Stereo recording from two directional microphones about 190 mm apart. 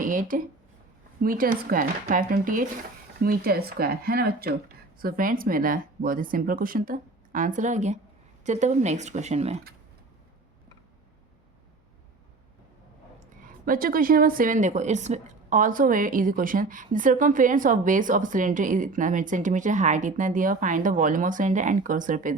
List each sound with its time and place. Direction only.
0.0 s a sound: 45° right (ahead or behind)
1.2 s a woman's voice: 50° right (ahead or behind)
13.7 s a woman's voice: 50° right (ahead or behind)